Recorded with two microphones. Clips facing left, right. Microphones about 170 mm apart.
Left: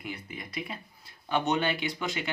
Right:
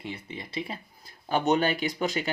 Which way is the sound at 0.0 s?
25° right (ahead or behind).